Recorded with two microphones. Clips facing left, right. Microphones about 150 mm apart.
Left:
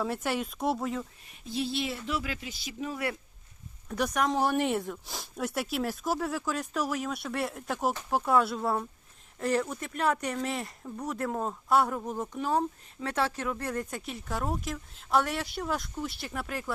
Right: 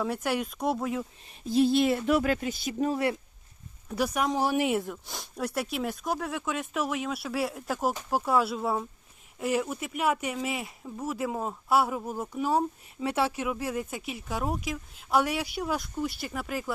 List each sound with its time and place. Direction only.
0.0 s speech: centre (ahead or behind)
1.3 s speech: 45° right (ahead or behind)
3.8 s speech: 5° right (ahead or behind)